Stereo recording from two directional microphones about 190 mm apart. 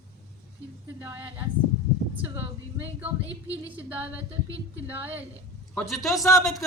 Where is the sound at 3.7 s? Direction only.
10° right (ahead or behind).